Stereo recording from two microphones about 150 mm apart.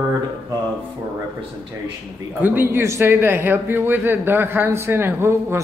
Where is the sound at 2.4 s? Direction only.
15° right (ahead or behind).